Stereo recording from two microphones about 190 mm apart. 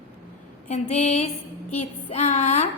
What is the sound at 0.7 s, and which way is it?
A woman's voice, 35° left (ahead or behind).